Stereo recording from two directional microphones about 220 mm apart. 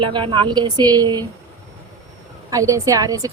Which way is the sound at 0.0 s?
20° right (ahead or behind).